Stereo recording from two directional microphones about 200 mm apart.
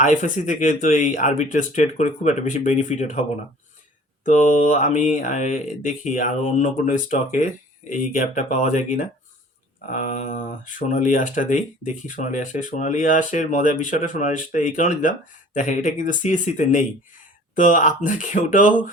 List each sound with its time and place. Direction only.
0.0 s speech: 40° left (ahead or behind)
4.3 s speech: 40° left (ahead or behind)